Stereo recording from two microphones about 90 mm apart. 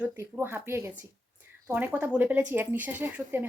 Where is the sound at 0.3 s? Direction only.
25° right (ahead or behind).